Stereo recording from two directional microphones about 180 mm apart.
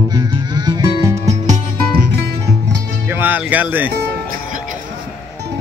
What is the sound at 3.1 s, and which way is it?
Speech, 10° right (ahead or behind).